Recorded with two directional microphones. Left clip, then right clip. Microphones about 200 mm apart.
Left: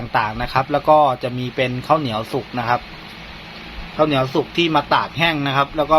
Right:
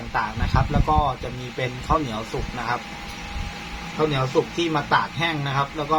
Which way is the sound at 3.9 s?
40° left (ahead or behind).